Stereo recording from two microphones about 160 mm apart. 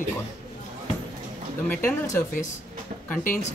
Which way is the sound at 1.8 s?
15° left (ahead or behind).